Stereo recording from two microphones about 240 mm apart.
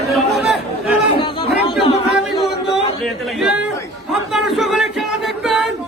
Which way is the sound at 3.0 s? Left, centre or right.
Centre.